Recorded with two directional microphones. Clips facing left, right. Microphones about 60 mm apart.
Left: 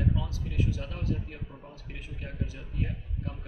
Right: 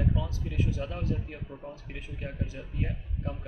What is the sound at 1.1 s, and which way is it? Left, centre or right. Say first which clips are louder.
Speech: right 1 dB; centre.